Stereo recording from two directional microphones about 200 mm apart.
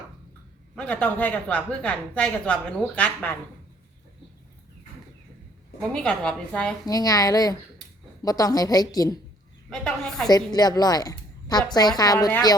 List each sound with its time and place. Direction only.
0.8 s a woman's voice: 5° left (ahead or behind)
5.8 s a woman's voice: 5° left (ahead or behind)
6.8 s a woman's voice: 20° left (ahead or behind)
9.6 s a woman's voice: 5° left (ahead or behind)
10.2 s a woman's voice: 20° left (ahead or behind)